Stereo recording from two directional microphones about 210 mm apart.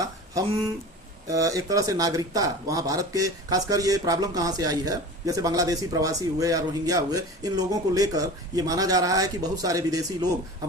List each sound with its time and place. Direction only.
1.3 s speech: 15° right (ahead or behind)